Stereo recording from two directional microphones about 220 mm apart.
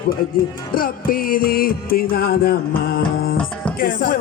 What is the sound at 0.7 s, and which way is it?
Music, 40° left (ahead or behind).